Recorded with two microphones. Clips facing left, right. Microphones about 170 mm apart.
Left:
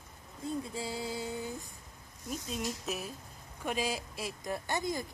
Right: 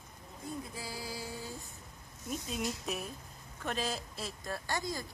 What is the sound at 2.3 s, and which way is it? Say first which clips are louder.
Speech: even; centre (ahead or behind).